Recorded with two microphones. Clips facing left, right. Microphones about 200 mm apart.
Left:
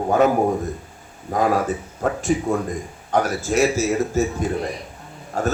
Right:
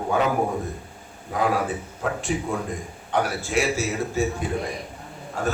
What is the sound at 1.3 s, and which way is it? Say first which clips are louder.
A man's voice: left 4 dB; 40° left (ahead or behind).